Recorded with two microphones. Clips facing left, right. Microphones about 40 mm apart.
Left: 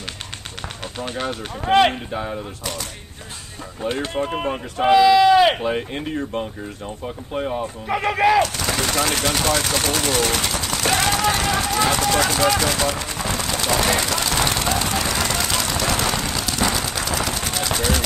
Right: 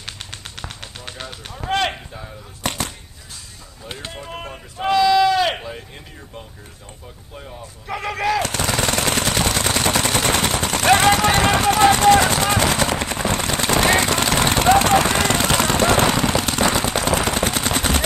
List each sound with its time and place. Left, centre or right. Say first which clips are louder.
1.6 s speech: left 5 dB; centre
2.6 s speech: right 5 dB; right
4.8 s speech: left 3 dB; centre
5.6 s speech: left 10 dB; left
7.9 s speech: left 4 dB; centre
8.5 s machine gun: right 2 dB; right
9.7 s gunshot: right 2 dB; right
14.9 s machine gun: right 6 dB; right